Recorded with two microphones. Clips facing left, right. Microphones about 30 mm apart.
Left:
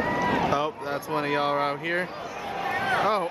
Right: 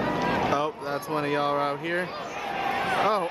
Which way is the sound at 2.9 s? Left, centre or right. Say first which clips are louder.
Left 1 dB; centre.